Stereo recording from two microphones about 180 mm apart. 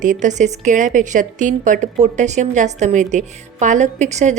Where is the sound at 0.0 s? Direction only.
45° right (ahead or behind).